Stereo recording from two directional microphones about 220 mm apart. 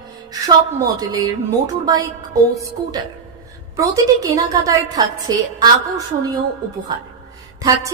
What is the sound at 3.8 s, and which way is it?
A woman's voice, 15° right (ahead or behind).